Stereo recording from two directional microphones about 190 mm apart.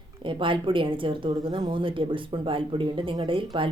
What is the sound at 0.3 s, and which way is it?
Speech, 25° right (ahead or behind).